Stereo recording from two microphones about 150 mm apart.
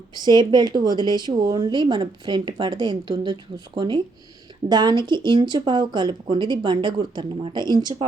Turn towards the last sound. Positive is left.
turn(degrees=-30)  # may be behind; listen again after turning